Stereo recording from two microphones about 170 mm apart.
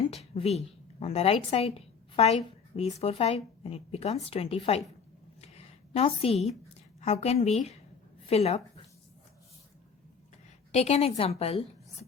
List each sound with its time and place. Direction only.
0.1 s a woman's voice: 40° left (ahead or behind)
5.4 s a sound: 35° left (ahead or behind)
7.0 s a woman's voice: 40° left (ahead or behind)
10.7 s a woman's voice: 40° left (ahead or behind)